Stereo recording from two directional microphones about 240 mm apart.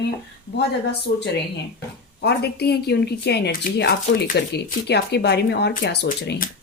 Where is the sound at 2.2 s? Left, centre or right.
Left.